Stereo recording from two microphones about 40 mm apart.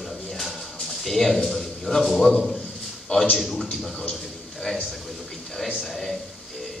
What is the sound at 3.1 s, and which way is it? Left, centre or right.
Speech, left.